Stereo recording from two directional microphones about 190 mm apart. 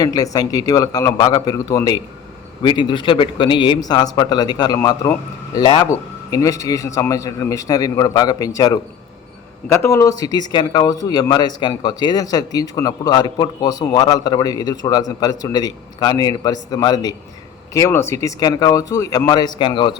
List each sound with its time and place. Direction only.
0.0 s speech: 20° left (ahead or behind)